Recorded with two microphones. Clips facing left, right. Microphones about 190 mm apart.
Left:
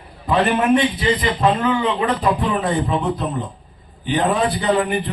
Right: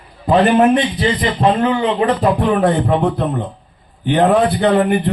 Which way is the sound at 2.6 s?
60° right (ahead or behind).